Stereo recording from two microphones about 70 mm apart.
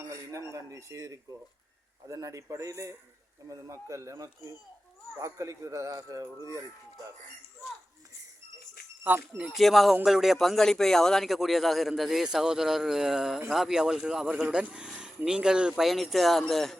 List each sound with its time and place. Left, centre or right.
0.1 s dishes: right
0.7 s speech: right
9.0 s speech: right
9.5 s speech: centre
15.8 s speech: centre